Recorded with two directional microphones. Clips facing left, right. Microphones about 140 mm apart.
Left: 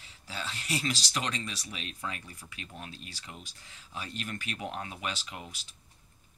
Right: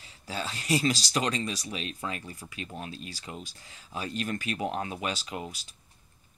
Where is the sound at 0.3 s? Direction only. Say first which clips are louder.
Right 7 dB; 40° right (ahead or behind).